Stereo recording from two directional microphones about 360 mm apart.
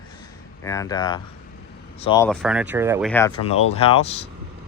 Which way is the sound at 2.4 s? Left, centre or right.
Centre.